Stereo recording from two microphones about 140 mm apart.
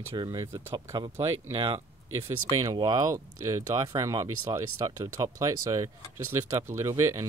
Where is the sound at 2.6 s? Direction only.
25° right (ahead or behind).